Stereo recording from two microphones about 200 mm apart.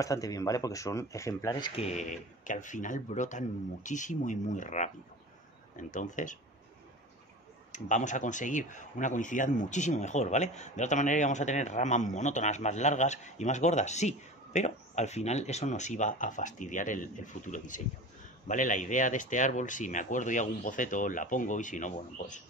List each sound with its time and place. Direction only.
0.0 s speech: 15° left (ahead or behind)
1.9 s speech: 35° left (ahead or behind)
7.7 s speech: 40° left (ahead or behind)